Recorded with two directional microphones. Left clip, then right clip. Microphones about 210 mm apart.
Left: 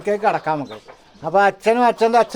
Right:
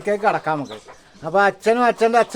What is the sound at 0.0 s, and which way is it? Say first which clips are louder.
A man's voice: left 1 dB; 5° left (ahead or behind).